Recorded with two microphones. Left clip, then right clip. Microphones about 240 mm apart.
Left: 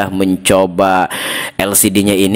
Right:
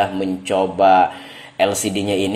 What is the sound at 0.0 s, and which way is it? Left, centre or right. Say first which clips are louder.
Speech: left 5 dB; left.